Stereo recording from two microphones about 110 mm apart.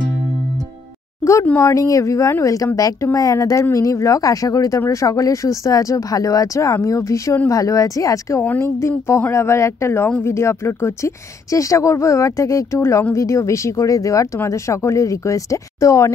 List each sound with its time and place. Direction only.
1.6 s speech: 30° left (ahead or behind)